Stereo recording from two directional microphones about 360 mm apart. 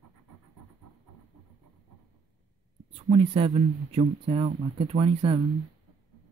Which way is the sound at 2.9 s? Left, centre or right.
Centre.